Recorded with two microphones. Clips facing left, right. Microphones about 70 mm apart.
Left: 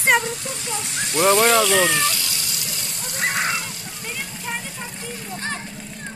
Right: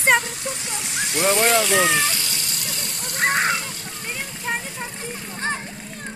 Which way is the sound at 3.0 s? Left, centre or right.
Right.